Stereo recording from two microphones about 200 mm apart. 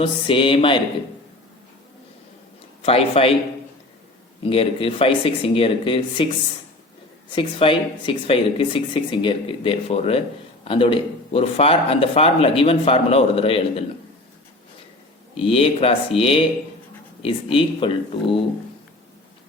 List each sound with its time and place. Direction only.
0.0 s speech: 25° left (ahead or behind)
2.8 s speech: 30° left (ahead or behind)
4.4 s speech: 25° left (ahead or behind)
7.3 s speech: 25° left (ahead or behind)
15.4 s speech: 25° left (ahead or behind)